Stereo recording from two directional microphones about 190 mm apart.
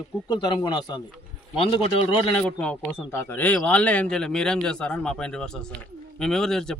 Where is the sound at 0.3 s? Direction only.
20° left (ahead or behind).